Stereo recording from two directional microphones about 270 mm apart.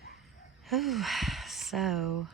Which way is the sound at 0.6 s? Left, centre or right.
Centre.